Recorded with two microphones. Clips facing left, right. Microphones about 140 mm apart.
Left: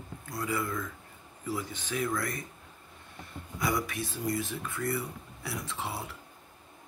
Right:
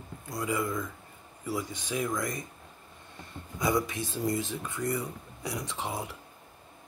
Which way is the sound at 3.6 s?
20° right (ahead or behind).